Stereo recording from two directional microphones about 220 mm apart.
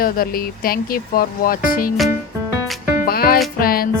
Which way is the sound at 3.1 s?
45° left (ahead or behind).